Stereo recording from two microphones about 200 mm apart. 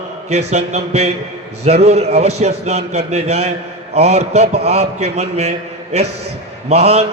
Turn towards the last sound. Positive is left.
turn(degrees=-30)  # may be behind; listen again after turning